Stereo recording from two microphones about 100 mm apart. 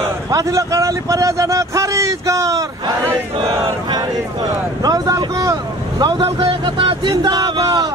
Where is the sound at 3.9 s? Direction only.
40° right (ahead or behind).